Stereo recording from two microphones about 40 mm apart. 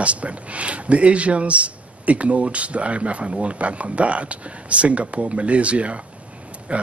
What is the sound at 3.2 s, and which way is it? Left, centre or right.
Speech, right.